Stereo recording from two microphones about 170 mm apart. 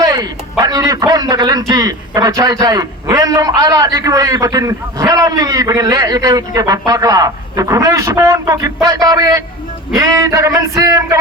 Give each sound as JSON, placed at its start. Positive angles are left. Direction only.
{"t": 0.0, "sound": "a man's voice", "side_deg": -20}